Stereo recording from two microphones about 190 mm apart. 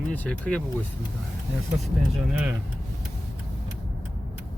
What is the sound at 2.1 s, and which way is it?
Speech, 10° right (ahead or behind).